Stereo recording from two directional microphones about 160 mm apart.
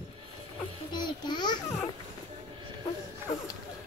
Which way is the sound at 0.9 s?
25° left (ahead or behind).